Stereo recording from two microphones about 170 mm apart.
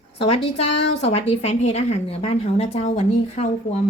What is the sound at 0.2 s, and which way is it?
A woman's voice, 35° left (ahead or behind).